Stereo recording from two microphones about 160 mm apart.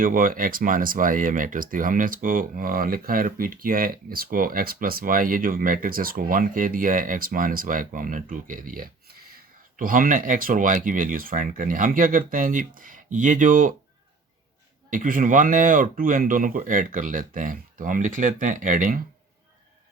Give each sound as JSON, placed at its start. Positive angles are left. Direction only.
{"t": 0.0, "sound": "speech", "side_deg": -60}
{"t": 14.8, "sound": "speech", "side_deg": -55}